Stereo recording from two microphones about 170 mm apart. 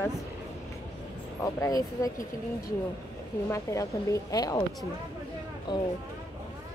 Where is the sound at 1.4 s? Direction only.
20° left (ahead or behind).